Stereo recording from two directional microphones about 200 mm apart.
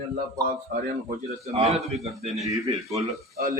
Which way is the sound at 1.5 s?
30° right (ahead or behind).